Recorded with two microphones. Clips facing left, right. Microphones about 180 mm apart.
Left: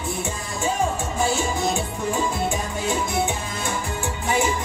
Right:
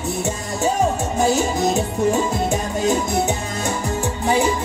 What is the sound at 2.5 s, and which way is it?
Music, 40° right (ahead or behind).